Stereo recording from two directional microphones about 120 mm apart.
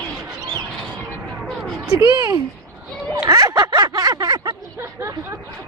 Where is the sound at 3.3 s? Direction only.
30° right (ahead or behind).